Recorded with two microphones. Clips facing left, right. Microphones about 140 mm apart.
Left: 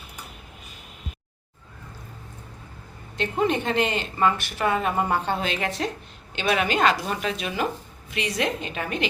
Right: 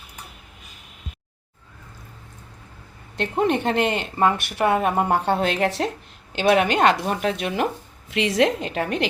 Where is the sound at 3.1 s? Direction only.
65° right (ahead or behind).